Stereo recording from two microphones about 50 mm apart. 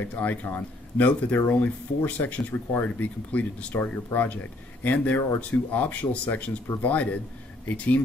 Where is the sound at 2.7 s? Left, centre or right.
Left.